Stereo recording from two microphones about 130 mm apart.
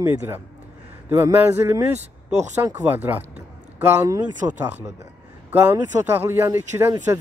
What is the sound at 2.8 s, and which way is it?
Speech, 15° right (ahead or behind).